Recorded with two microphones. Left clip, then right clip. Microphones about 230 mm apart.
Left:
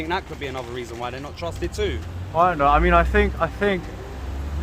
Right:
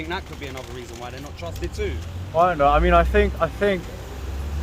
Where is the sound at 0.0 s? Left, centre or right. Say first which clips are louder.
Left 4 dB; left.